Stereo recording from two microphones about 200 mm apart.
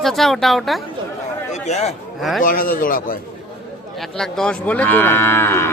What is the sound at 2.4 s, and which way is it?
Speech, 45° left (ahead or behind).